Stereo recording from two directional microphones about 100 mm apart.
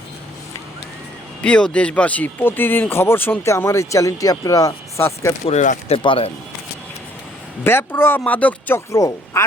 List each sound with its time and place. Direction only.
1.4 s speech: 10° left (ahead or behind); by 5.3 s 25° left (ahead or behind)
5.5 s speech: 75° left (ahead or behind)
7.6 s speech: 25° left (ahead or behind)
8.9 s speech: 35° left (ahead or behind)